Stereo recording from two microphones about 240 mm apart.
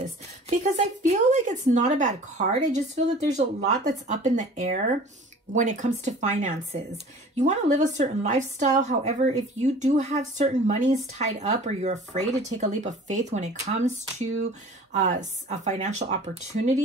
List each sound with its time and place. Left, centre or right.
0.0 s speech: right